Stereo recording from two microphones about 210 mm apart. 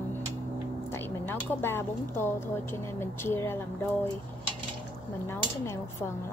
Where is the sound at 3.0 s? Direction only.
10° left (ahead or behind).